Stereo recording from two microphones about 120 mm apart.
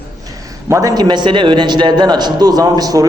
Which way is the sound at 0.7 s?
30° right (ahead or behind).